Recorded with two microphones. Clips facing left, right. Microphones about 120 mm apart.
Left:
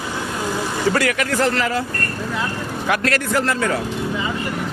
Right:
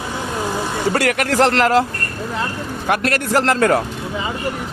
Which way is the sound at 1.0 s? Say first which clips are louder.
Right 2 dB; 60° right (ahead or behind).